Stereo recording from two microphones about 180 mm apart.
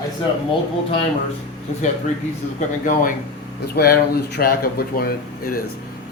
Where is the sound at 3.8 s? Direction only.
60° left (ahead or behind).